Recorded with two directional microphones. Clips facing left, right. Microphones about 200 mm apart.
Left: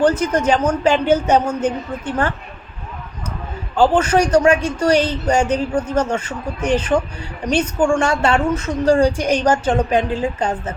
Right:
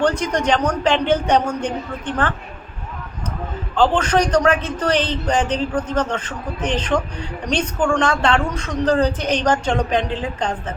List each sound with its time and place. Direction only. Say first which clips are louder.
0.0 s a man's voice: left 3 dB; 5° left (ahead or behind)
3.8 s a man's voice: left 2 dB; 10° left (ahead or behind)